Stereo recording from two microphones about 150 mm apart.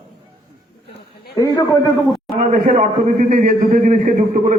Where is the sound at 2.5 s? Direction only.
60° right (ahead or behind).